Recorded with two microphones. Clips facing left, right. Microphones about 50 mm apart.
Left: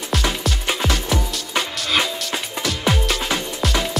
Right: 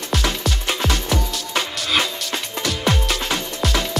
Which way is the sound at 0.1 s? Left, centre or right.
Centre.